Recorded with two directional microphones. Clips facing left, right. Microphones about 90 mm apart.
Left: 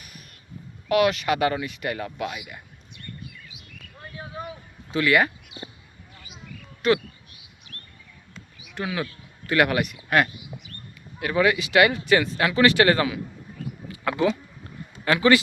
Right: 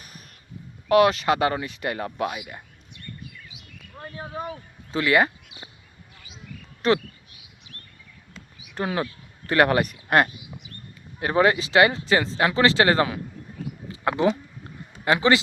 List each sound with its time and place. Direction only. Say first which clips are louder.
0.9 s speech: right 3 dB; 30° right (ahead or behind)
4.0 s a sound: right 3 dB; 35° right (ahead or behind)
6.8 s speech: even; 35° right (ahead or behind)
8.7 s speech: right 2 dB; 40° right (ahead or behind)
13.9 s a sound: right 1 dB; 30° right (ahead or behind)
15.0 s speech: left 1 dB; 25° right (ahead or behind)